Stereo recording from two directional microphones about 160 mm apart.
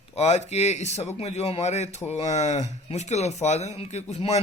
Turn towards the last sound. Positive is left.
turn(degrees=45)  # may be behind; listen again after turning